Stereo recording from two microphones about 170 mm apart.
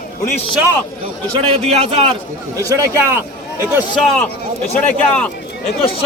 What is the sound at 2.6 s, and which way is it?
Speech, 20° right (ahead or behind).